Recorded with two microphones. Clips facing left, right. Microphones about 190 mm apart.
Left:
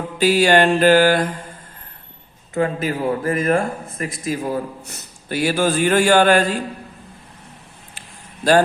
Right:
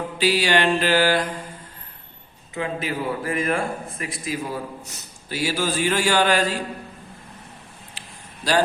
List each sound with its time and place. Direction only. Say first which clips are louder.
0.2 s a man's voice: left 6 dB; 45° left (ahead or behind)
2.6 s a man's voice: left 6 dB; 45° left (ahead or behind)